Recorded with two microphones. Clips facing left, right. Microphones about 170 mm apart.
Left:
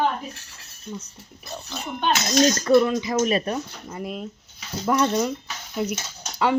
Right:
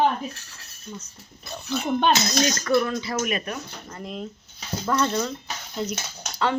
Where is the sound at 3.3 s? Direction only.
30° left (ahead or behind).